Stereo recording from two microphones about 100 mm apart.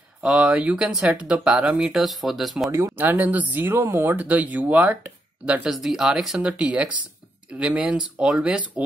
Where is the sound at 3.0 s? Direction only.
20° right (ahead or behind).